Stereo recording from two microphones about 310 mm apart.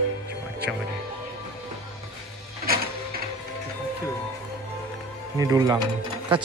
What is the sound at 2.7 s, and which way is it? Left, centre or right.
Mechanisms, right.